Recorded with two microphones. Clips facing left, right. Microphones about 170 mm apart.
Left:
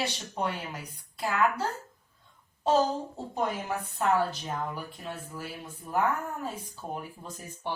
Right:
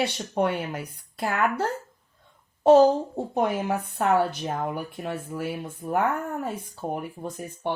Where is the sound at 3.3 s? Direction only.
60° right (ahead or behind).